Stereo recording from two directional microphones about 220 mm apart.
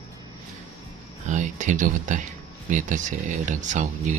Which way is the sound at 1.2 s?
35° right (ahead or behind).